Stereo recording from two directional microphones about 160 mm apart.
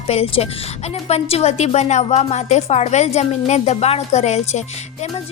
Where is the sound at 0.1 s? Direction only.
40° left (ahead or behind).